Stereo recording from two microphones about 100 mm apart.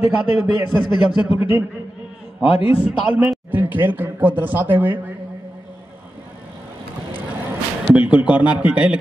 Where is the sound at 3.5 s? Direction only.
20° right (ahead or behind).